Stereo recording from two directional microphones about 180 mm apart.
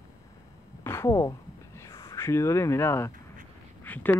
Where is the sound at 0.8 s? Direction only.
15° left (ahead or behind).